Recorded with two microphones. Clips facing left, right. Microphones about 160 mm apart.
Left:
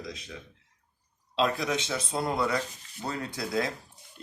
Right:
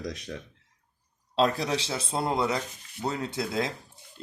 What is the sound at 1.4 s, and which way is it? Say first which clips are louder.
Speech: right 2 dB; 35° right (ahead or behind).